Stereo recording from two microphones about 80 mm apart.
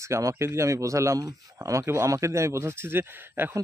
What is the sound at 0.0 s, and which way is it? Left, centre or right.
Speech, right.